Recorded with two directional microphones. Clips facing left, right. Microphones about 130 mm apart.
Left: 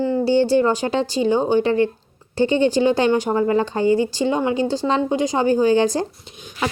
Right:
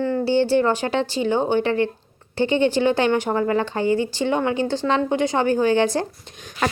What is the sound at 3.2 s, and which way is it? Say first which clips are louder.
Speech: left 2 dB; 20° left (ahead or behind).